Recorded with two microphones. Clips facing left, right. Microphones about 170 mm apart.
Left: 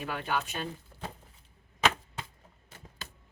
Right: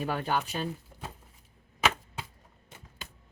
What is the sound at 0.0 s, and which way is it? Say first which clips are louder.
Speech: right 3 dB; 35° right (ahead or behind).